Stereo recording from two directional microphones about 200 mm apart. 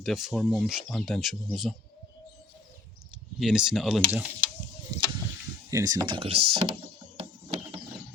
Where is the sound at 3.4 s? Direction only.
Centre (ahead or behind).